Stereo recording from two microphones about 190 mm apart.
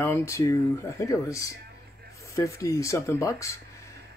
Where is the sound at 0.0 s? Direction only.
15° left (ahead or behind).